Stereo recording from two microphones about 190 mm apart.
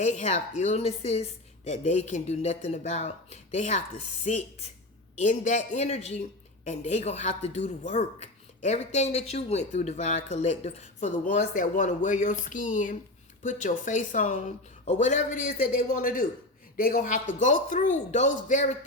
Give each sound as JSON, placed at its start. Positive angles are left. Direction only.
{"t": 0.0, "sound": "a woman's voice", "side_deg": 40}